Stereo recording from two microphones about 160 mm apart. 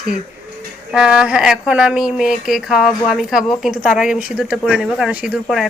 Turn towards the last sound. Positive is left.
turn(degrees=-5)  # may be behind; listen again after turning